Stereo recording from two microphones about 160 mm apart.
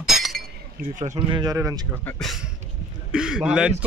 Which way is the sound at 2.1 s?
5° left (ahead or behind).